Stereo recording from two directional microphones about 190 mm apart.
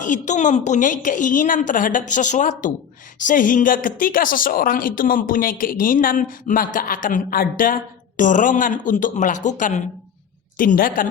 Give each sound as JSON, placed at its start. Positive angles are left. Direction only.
{"t": 0.0, "sound": "a woman's voice", "side_deg": 40}